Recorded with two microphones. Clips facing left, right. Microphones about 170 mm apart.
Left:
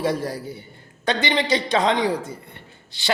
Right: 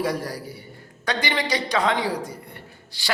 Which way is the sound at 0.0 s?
25° left (ahead or behind).